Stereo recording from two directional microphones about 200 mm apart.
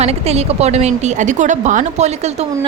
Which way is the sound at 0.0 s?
30° right (ahead or behind).